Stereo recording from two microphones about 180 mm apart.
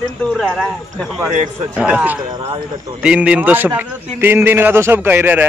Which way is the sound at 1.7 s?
5° right (ahead or behind).